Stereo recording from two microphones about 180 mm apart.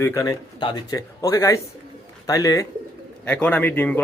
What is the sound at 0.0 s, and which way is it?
Speech, 15° left (ahead or behind).